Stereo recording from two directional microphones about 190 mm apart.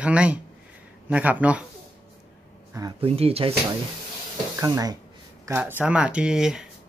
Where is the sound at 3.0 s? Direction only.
30° right (ahead or behind).